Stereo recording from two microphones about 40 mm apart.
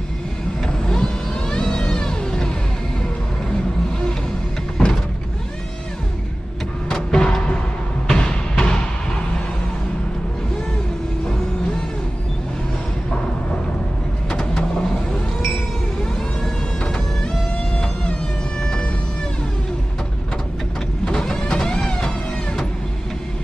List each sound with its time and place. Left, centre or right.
0.7 s vehicle: centre
4.8 s a sound: left
6.9 s vehicle: centre
8.1 s music: left
14.4 s vehicle: centre
16.8 s music: left
18.6 s siren: centre
21.0 s vehicle: left